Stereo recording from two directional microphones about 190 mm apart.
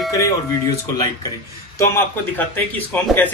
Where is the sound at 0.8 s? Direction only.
20° left (ahead or behind).